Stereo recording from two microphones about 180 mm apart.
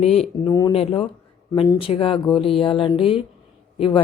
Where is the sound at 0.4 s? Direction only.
20° left (ahead or behind).